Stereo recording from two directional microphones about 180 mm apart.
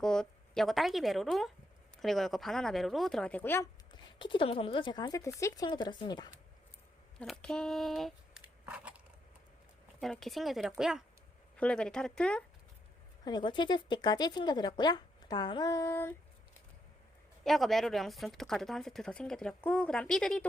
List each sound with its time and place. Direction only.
0.0 s speech: 5° left (ahead or behind)
3.9 s speech: 25° left (ahead or behind)
7.2 s speech: 5° left (ahead or behind)
10.0 s speech: centre (ahead or behind)
13.2 s speech: 25° left (ahead or behind)
17.4 s speech: centre (ahead or behind)